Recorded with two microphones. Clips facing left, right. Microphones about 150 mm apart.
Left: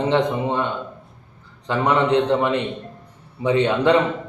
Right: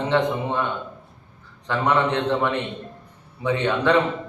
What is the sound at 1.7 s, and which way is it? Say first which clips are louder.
A man's voice: left 3 dB; 15° left (ahead or behind).